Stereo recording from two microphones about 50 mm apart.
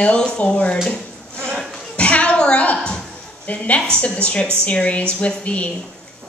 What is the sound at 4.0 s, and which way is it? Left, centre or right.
A woman's voice, left.